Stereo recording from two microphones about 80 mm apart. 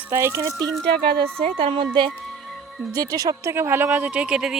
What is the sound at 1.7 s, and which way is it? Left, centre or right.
Speech, right.